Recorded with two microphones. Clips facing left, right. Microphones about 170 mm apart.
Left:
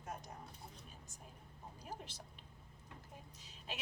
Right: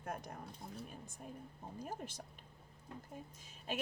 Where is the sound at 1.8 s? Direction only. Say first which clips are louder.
Right 5 dB; 50° right (ahead or behind).